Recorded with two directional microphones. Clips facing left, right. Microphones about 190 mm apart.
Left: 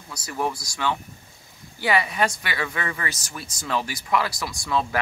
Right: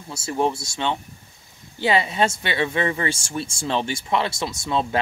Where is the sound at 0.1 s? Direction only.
25° right (ahead or behind).